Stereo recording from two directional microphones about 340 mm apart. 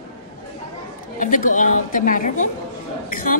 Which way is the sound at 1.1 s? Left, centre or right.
Left.